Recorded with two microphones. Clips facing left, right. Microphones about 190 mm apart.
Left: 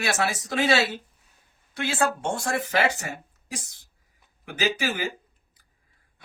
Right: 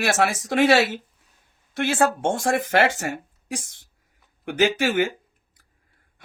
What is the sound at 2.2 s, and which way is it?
Speech, 85° right.